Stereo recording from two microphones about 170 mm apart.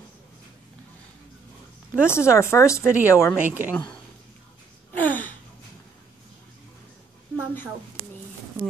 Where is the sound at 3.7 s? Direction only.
10° left (ahead or behind).